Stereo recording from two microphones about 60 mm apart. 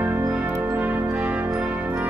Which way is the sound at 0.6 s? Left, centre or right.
Right.